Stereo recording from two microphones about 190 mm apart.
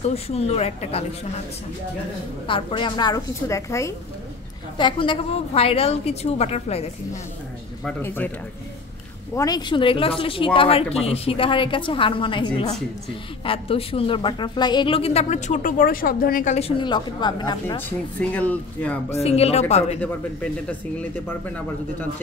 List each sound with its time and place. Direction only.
0.1 s a woman's voice: 30° left (ahead or behind)
2.4 s a woman's voice: 25° left (ahead or behind)
7.8 s speech: 10° left (ahead or behind)
9.3 s a woman's voice: 20° left (ahead or behind); by 16.5 s 50° left (ahead or behind)
16.5 s speech: 30° left (ahead or behind)
17.7 s speech: 10° left (ahead or behind)
19.0 s a woman's voice: 35° left (ahead or behind)